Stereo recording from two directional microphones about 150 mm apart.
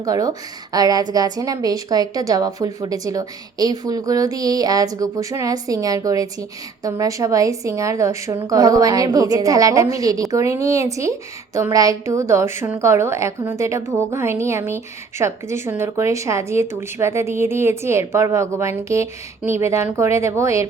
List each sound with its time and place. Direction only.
0.0 s a woman's voice: 25° right (ahead or behind)